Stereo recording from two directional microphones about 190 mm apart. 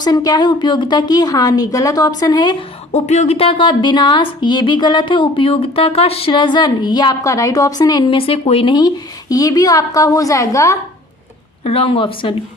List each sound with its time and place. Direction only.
0.0 s speech: 20° left (ahead or behind)
2.9 s a woman's voice: 35° left (ahead or behind); by 10.8 s 15° left (ahead or behind)
11.6 s speech: 30° left (ahead or behind)